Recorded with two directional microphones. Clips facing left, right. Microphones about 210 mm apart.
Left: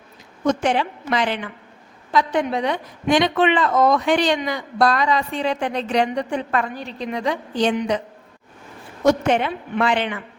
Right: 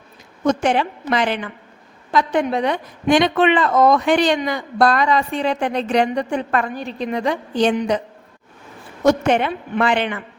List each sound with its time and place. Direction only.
0.6 s a woman's voice: 60° right (ahead or behind)
7.8 s a woman's voice: 35° right (ahead or behind)
9.0 s a woman's voice: 60° right (ahead or behind)